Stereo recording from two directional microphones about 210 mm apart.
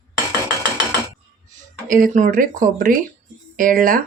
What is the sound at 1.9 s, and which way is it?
Speech, 40° right (ahead or behind).